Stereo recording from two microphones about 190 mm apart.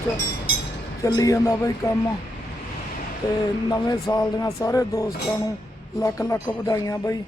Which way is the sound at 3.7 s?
20° left (ahead or behind).